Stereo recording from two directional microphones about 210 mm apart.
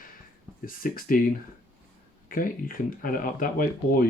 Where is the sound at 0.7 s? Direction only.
40° left (ahead or behind).